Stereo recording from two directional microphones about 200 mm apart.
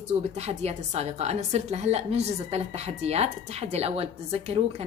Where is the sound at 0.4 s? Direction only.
30° right (ahead or behind).